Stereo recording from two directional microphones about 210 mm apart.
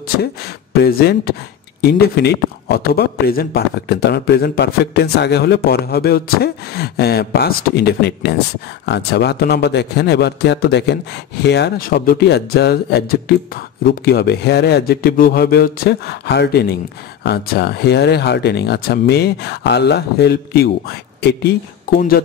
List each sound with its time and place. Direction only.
0.0 s speech: 45° left (ahead or behind)